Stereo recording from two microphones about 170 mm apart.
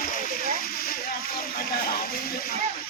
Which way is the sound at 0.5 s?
60° left (ahead or behind).